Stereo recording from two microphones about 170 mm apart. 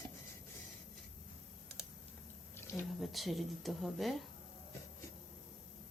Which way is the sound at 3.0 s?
Centre (ahead or behind).